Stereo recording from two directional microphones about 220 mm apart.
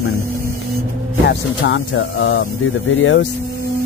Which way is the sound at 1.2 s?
50° left (ahead or behind).